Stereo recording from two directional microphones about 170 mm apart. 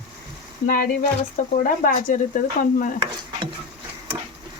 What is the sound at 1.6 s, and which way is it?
Speech, 55° left (ahead or behind).